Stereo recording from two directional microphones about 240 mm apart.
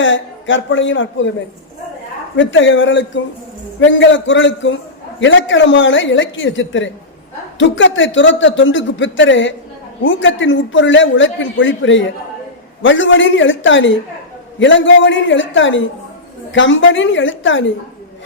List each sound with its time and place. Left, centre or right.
0.0 s a man's voice: left
2.3 s a man's voice: left